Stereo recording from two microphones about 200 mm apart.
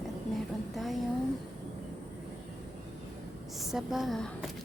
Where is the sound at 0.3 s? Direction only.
Centre (ahead or behind).